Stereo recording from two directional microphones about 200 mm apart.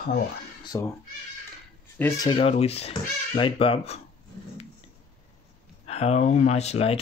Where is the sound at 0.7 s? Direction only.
20° left (ahead or behind).